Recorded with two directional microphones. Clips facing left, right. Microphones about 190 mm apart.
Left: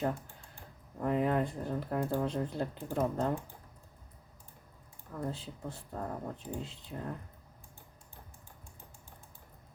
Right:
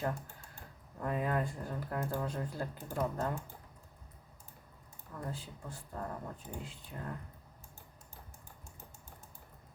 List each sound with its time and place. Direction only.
1.0 s speech: 20° left (ahead or behind)
5.2 s speech: 25° left (ahead or behind)